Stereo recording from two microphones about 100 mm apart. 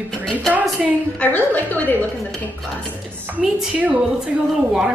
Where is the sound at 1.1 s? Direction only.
15° left (ahead or behind).